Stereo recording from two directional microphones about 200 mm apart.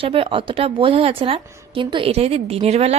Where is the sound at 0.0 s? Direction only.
25° right (ahead or behind).